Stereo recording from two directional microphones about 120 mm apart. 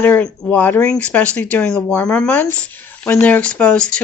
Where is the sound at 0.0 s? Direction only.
15° left (ahead or behind).